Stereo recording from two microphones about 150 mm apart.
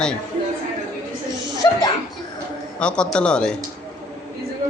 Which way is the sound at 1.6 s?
25° left (ahead or behind).